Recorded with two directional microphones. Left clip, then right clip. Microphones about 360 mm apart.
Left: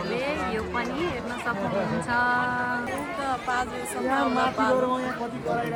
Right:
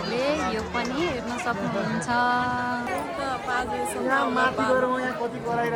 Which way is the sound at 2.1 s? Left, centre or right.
Centre.